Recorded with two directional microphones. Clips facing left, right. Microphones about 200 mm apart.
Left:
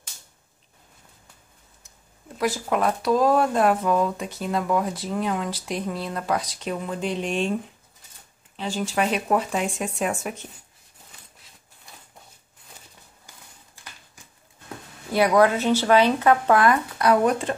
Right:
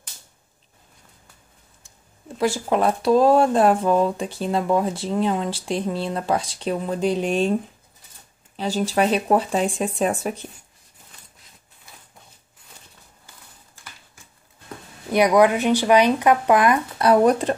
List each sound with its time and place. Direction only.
2.3 s speech: 30° right (ahead or behind)
8.5 s speech: 40° right (ahead or behind)
15.1 s speech: 15° right (ahead or behind)
17.0 s speech: 35° right (ahead or behind)